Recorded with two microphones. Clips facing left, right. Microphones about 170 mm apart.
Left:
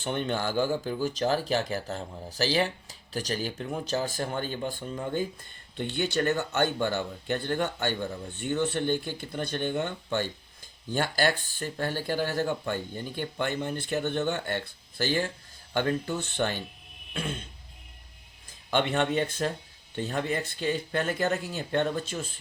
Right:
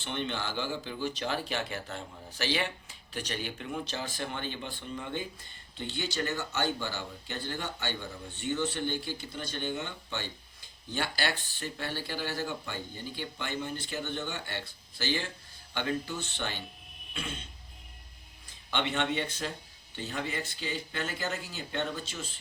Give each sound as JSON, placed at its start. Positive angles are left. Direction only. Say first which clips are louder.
{"t": 0.0, "sound": "speech", "louder": "left 6 dB", "side_deg": 45}
{"t": 5.7, "sound": "speech", "louder": "left 7 dB", "side_deg": 55}
{"t": 18.7, "sound": "speech", "louder": "left 5 dB", "side_deg": 45}